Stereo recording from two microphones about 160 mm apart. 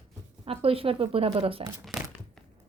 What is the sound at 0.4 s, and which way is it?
Speech, 35° right (ahead or behind).